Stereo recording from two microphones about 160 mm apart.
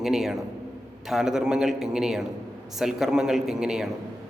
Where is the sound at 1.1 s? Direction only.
5° right (ahead or behind).